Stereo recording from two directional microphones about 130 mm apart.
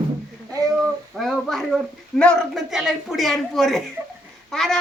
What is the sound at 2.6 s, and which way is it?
Speech, 5° right (ahead or behind).